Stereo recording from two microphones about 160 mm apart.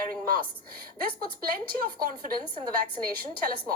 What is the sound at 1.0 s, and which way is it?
A woman's voice, 70° right (ahead or behind).